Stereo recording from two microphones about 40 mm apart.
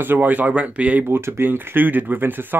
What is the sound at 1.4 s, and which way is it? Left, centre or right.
Speech, right.